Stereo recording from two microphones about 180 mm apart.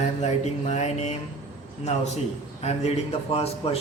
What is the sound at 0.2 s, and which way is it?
Speech, 40° left (ahead or behind).